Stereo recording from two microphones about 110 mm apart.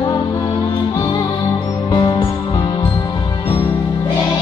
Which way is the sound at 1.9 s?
40° left (ahead or behind).